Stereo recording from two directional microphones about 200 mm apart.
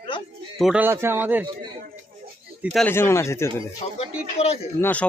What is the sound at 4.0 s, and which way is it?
Speech, 30° left (ahead or behind).